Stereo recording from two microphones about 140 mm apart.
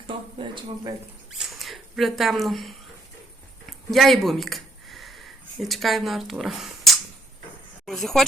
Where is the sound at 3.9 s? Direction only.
Centre (ahead or behind).